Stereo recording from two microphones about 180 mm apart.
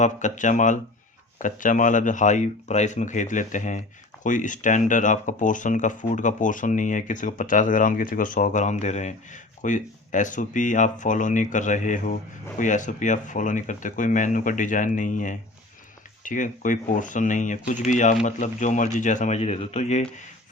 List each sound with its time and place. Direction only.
0.0 s speech: 45° left (ahead or behind)